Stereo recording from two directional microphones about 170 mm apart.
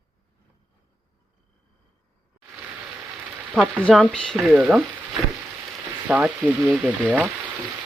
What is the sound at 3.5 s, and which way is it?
Frying, 5° right (ahead or behind).